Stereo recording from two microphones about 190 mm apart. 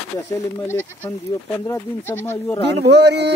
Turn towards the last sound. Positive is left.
turn(degrees=-65)  # may be behind; listen again after turning